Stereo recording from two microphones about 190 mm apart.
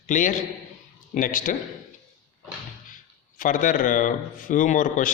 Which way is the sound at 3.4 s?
45° left (ahead or behind).